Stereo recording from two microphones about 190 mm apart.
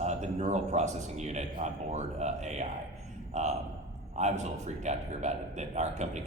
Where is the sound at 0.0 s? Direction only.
35° right (ahead or behind).